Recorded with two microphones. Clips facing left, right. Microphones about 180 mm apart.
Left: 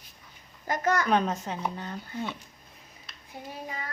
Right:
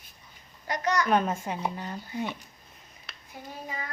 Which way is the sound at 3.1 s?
70° right (ahead or behind).